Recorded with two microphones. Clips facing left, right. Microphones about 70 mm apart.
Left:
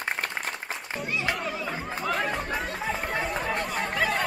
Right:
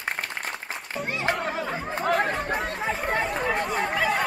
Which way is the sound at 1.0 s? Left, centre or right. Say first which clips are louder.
Right 3 dB; right.